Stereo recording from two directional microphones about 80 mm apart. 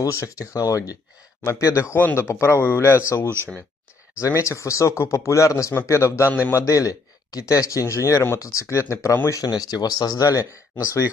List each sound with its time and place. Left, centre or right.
0.0 s speech: left
4.2 s speech: left
6.6 s speech: left
9.3 s speech: left